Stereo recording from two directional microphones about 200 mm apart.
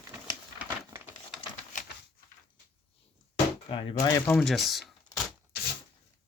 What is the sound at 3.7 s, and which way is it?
Speech, 20° left (ahead or behind).